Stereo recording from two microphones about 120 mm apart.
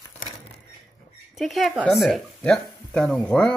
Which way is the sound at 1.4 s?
Centre (ahead or behind).